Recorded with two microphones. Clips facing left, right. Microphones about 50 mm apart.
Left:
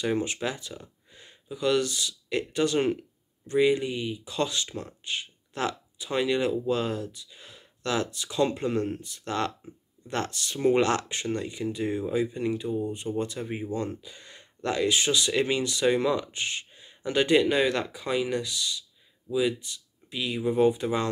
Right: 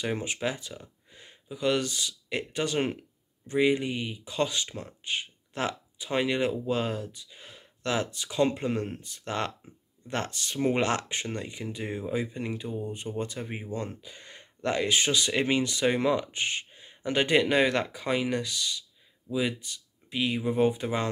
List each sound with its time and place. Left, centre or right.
0.0 s speech: centre; by 4.3 s right
4.3 s speech: right
17.4 s speech: right